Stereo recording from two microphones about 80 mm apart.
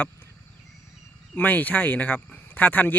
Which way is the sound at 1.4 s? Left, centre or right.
Left.